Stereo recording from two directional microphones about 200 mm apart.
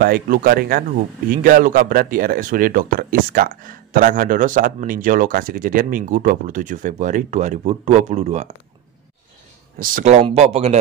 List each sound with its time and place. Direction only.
0.0 s speech: 45° right (ahead or behind)
9.8 s speech: 40° right (ahead or behind)